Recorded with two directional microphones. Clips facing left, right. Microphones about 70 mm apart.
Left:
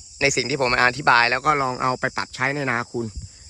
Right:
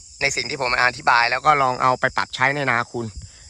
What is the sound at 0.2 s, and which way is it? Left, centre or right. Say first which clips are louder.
Speech: left 3 dB; right.